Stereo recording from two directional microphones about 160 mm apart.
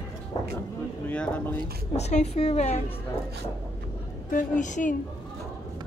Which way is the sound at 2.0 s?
45° left (ahead or behind).